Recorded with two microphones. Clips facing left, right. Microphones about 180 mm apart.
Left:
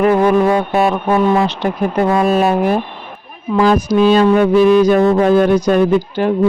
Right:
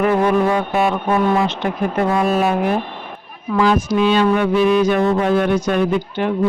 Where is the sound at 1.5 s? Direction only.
35° left (ahead or behind).